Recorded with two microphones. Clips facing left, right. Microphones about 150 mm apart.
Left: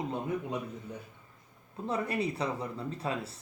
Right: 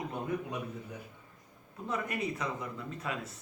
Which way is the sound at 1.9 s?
30° left (ahead or behind).